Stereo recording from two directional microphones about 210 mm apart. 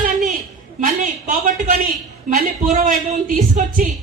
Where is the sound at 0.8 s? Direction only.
40° right (ahead or behind).